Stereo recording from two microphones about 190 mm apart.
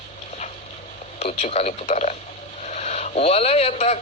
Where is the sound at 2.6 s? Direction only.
35° left (ahead or behind).